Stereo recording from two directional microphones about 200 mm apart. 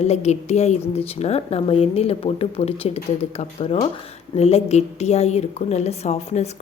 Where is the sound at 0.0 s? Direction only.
35° left (ahead or behind).